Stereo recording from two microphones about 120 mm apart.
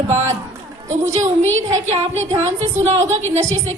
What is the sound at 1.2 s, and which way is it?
Speech, 80° right.